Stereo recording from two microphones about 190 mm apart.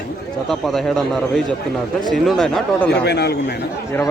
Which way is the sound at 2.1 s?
Centre (ahead or behind).